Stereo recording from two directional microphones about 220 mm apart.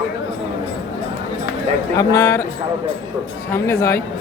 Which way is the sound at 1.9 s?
15° left (ahead or behind).